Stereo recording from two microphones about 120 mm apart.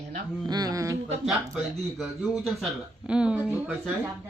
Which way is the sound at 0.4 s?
35° right (ahead or behind).